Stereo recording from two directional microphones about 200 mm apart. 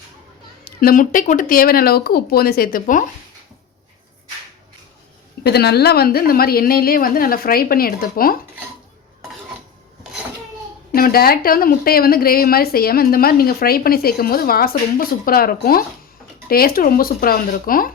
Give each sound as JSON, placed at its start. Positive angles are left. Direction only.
{"t": 0.6, "sound": "a woman's voice", "side_deg": 45}
{"t": 5.4, "sound": "a woman's voice", "side_deg": 55}
{"t": 10.9, "sound": "a woman's voice", "side_deg": 45}